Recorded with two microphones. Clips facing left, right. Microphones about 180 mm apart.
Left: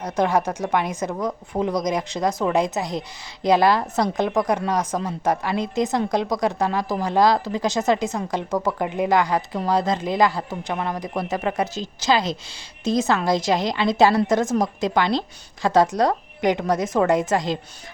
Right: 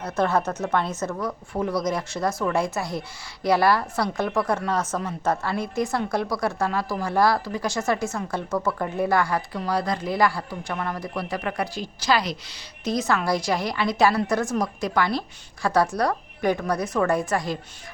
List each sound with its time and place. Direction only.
0.0 s a woman's voice: 15° left (ahead or behind)